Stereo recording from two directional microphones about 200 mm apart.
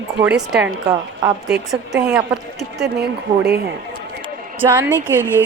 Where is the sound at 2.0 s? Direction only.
5° right (ahead or behind).